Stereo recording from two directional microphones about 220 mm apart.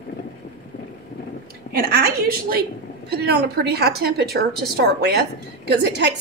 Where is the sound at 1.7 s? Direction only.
40° right (ahead or behind).